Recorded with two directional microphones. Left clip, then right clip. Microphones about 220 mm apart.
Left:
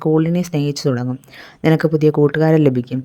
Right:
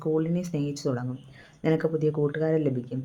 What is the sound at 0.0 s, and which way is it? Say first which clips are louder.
Speech: left 10 dB; 40° left (ahead or behind).